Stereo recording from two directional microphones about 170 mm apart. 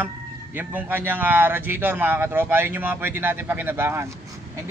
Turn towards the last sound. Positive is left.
turn(degrees=-15)  # may be behind; listen again after turning